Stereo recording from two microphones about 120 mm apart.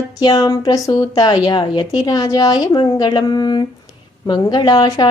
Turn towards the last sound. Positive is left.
turn(degrees=35)  # may be behind; listen again after turning